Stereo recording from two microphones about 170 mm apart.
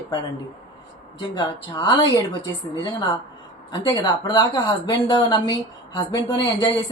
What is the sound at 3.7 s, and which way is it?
Speech, 25° left (ahead or behind).